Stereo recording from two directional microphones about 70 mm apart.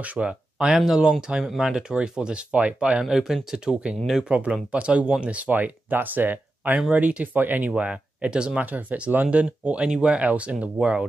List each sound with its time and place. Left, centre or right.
0.0 s speech: centre